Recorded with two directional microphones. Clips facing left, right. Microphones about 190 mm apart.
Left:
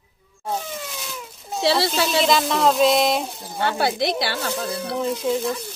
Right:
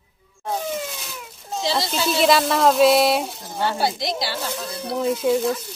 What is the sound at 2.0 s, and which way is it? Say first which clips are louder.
Speech: right 6 dB; 5° right (ahead or behind).